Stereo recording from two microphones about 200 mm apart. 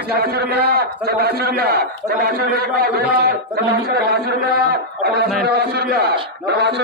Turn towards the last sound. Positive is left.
turn(degrees=-55)  # may be behind; listen again after turning